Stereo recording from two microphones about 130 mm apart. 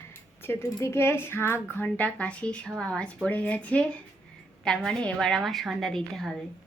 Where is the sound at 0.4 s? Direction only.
20° left (ahead or behind); by 6.3 s centre (ahead or behind).